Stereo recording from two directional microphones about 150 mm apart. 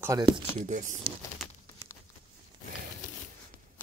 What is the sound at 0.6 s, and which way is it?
Speech, 55° right (ahead or behind).